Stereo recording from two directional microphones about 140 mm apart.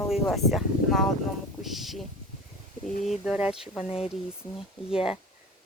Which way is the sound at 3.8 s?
45° left (ahead or behind).